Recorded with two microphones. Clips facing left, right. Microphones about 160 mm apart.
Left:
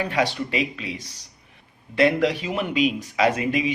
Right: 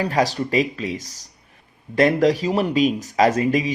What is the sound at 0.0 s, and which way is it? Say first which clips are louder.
Speech: right 3 dB; 40° right (ahead or behind).